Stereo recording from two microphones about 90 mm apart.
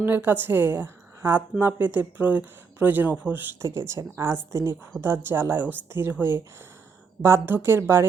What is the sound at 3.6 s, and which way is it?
Speech, 30° right (ahead or behind).